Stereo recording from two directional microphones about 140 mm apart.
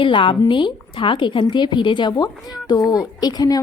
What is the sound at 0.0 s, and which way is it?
A woman's voice, 35° left (ahead or behind).